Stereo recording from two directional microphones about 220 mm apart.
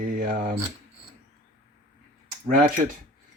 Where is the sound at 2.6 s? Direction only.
35° right (ahead or behind).